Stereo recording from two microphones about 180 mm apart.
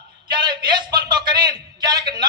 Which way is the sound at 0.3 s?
25° right (ahead or behind).